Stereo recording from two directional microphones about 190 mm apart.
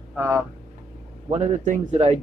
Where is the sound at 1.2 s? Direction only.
35° right (ahead or behind).